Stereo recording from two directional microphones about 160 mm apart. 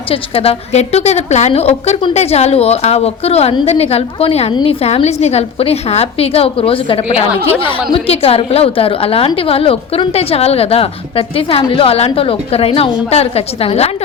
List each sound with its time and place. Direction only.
0.1 s a woman's voice: 35° left (ahead or behind)